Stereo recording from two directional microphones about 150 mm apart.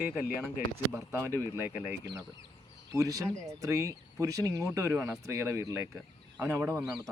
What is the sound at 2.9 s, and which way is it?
Speech, 20° right (ahead or behind).